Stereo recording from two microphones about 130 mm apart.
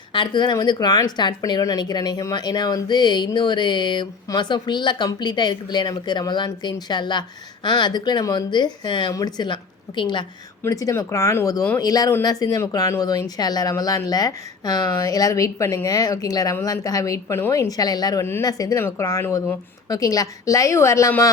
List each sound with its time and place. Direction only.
0.1 s a woman's voice: 35° left (ahead or behind)
10.6 s speech: 25° left (ahead or behind)